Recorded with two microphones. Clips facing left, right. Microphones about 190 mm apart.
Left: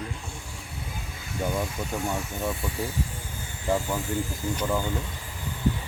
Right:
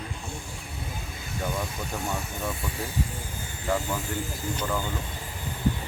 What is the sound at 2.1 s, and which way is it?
Speech, 15° left (ahead or behind).